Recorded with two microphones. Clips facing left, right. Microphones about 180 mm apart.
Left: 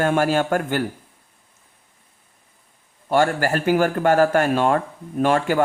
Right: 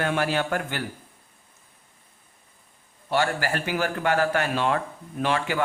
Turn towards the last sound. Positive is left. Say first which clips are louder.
# left 7 dB
turn(degrees=45)  # may be behind; listen again after turning